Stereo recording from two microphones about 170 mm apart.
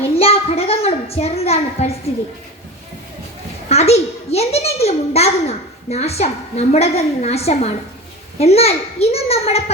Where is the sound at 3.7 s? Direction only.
40° left (ahead or behind).